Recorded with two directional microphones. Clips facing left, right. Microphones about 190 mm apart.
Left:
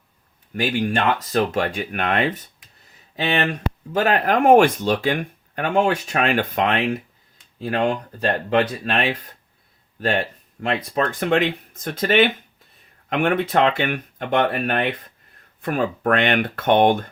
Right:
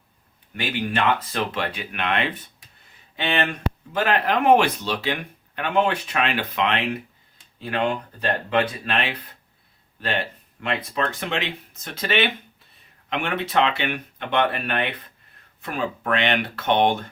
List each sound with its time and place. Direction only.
0.5 s speech: 45° left (ahead or behind)